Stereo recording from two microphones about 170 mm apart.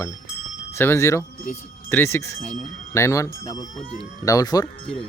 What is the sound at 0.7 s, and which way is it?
Speech, 15° left (ahead or behind).